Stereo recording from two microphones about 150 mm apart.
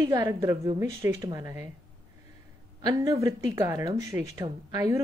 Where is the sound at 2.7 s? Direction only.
25° right (ahead or behind).